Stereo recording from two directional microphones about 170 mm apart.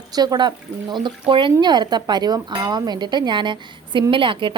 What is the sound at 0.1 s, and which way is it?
Speech, 25° right (ahead or behind).